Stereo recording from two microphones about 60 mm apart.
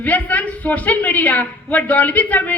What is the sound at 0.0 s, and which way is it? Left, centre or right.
A woman's voice, left.